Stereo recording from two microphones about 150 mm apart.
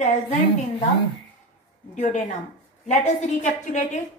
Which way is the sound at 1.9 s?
55° left (ahead or behind).